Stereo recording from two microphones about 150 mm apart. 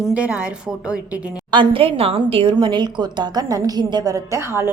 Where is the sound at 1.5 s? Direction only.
35° right (ahead or behind).